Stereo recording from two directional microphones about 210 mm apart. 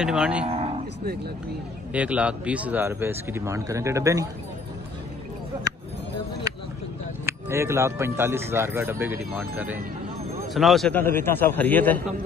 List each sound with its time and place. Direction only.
0.0 s cattle: 5° right (ahead or behind)
0.5 s cattle: 30° right (ahead or behind)
2.0 s speech: 5° right (ahead or behind)
7.2 s a man's voice: 10° right (ahead or behind); by 12.0 s 10° left (ahead or behind)